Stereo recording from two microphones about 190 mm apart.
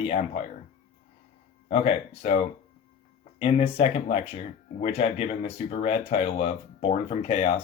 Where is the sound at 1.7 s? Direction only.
35° left (ahead or behind).